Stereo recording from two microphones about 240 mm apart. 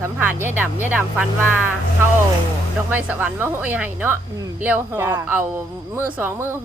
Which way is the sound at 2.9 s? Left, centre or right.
Centre.